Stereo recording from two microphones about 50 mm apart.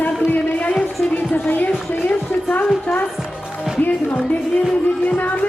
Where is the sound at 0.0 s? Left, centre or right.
Left.